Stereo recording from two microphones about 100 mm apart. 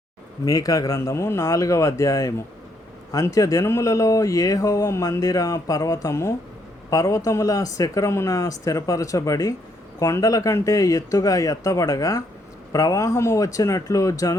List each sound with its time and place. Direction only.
0.4 s speech: 35° left (ahead or behind)